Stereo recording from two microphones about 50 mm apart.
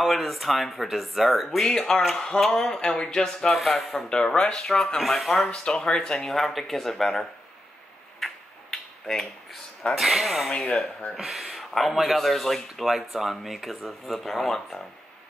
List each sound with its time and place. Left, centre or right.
0.0 s speech: centre
1.7 s speech: centre
3.5 s speech: centre
5.5 s speech: centre
8.2 s tick-tock: centre
10.8 s speech: left
11.1 s speech: centre